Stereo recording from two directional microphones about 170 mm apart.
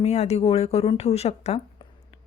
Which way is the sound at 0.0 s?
40° left (ahead or behind).